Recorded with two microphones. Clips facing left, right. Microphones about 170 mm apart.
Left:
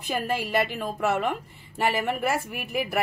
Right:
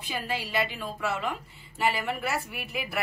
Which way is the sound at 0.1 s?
50° left (ahead or behind).